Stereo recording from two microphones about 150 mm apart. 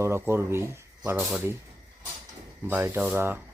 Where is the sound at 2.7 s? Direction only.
10° right (ahead or behind).